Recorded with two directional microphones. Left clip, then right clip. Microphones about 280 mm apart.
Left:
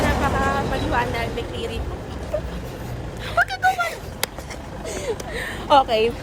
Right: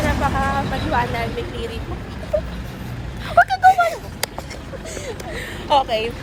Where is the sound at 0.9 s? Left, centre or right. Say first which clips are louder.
Right 4 dB; centre.